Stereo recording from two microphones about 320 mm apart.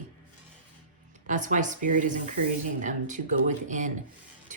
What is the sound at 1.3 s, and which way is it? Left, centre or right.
Speech, right.